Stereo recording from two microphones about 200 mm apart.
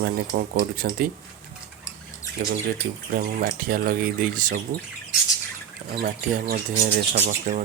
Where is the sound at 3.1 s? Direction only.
45° right (ahead or behind).